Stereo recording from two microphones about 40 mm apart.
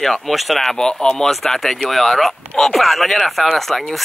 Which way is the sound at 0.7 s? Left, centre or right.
Centre.